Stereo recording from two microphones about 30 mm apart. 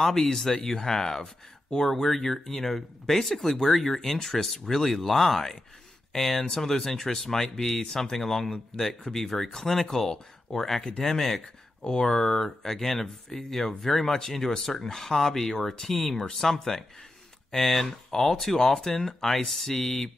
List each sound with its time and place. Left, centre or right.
0.0 s speech: centre
11.8 s speech: left
17.8 s speech: centre